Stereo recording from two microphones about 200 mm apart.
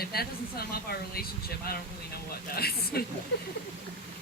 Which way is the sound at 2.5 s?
50° left (ahead or behind).